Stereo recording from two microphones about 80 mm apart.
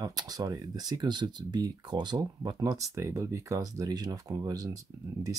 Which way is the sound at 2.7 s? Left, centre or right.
Right.